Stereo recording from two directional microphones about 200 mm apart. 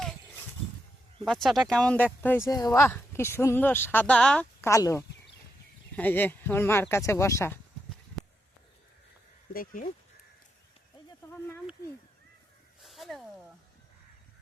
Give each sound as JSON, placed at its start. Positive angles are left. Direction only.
{"t": 1.2, "sound": "speech", "side_deg": 0}
{"t": 9.5, "sound": "speech", "side_deg": 45}
{"t": 11.3, "sound": "speech", "side_deg": 10}
{"t": 12.8, "sound": "a sound", "side_deg": 0}